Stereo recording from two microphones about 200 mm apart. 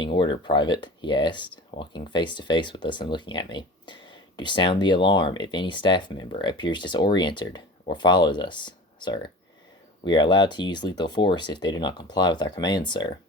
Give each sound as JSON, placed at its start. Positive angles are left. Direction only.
{"t": 0.0, "sound": "speech", "side_deg": 25}